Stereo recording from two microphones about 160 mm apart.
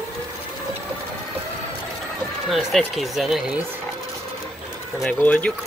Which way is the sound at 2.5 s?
Centre (ahead or behind).